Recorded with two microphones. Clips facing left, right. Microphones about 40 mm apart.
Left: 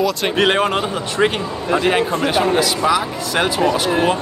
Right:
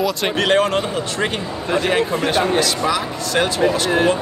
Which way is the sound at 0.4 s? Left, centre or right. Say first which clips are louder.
Even; centre.